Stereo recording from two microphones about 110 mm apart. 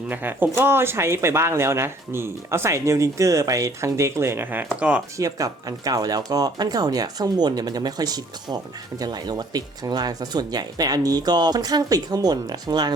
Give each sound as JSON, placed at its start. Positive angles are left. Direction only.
{"t": 0.1, "sound": "speech", "side_deg": -15}
{"t": 5.1, "sound": "speech", "side_deg": -30}